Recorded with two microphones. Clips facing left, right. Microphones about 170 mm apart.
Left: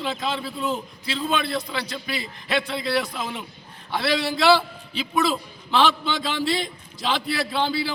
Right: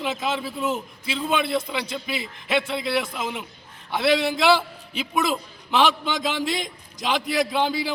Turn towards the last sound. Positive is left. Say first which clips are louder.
# right 1 dB
turn(degrees=-15)  # may be behind; listen again after turning